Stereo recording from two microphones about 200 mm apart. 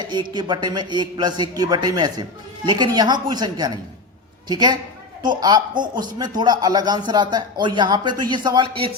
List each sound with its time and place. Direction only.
0.1 s a man's voice: 20° right (ahead or behind)